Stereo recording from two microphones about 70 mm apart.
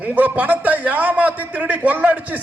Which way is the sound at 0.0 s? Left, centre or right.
Right.